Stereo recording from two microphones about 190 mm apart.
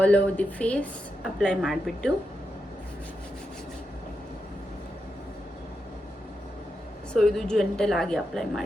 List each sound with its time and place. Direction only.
0.0 s a woman's voice: 5° left (ahead or behind)
7.1 s a woman's voice: centre (ahead or behind)